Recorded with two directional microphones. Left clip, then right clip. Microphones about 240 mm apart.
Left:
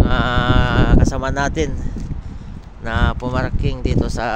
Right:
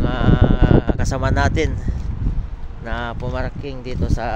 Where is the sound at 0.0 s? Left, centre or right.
Left; by 1.7 s centre.